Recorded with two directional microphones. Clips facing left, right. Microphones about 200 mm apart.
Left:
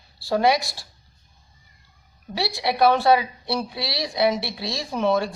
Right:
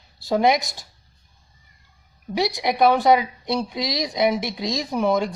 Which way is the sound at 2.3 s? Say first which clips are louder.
Right 3 dB; 20° right (ahead or behind).